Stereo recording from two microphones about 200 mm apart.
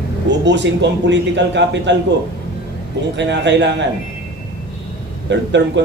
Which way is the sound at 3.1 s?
60° right (ahead or behind).